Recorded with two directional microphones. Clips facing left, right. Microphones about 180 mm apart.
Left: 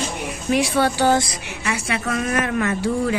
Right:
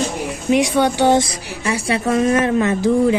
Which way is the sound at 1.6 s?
30° right (ahead or behind).